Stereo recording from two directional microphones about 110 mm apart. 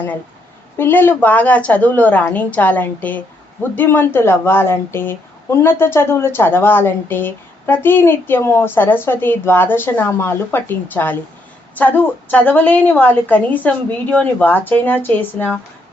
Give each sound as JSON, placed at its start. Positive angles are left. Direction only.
{"t": 0.8, "sound": "a woman's voice", "side_deg": 20}